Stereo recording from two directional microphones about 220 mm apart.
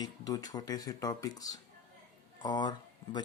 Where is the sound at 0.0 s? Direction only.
15° left (ahead or behind).